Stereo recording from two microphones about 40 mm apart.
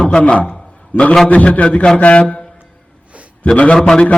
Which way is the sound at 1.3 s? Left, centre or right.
Left.